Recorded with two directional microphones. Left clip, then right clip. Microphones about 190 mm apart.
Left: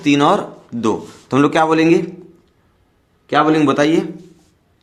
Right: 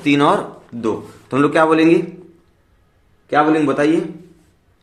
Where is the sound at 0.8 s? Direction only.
40° left (ahead or behind).